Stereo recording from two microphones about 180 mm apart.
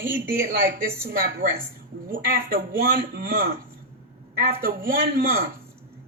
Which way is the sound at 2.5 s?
60° right (ahead or behind).